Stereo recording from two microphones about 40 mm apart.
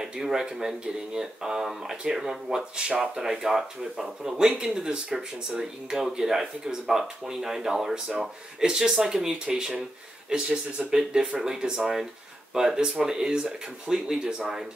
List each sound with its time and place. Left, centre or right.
0.0 s speech: centre